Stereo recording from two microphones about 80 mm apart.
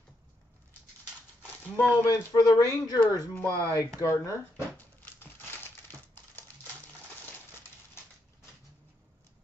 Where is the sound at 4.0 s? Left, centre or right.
Left.